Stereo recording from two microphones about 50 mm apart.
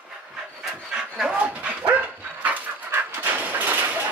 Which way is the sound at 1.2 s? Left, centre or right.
Right.